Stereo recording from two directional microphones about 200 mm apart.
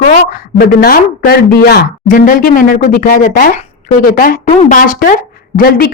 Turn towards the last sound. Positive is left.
turn(degrees=50)  # may be behind; listen again after turning